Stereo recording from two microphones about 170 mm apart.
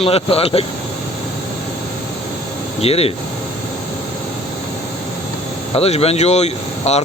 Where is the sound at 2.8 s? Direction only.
35° left (ahead or behind).